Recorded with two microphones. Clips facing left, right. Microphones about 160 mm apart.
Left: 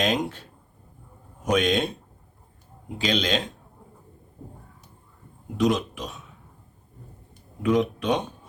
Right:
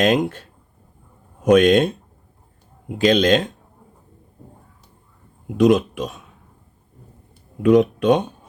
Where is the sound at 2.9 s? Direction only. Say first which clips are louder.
Right 9 dB; 50° right (ahead or behind).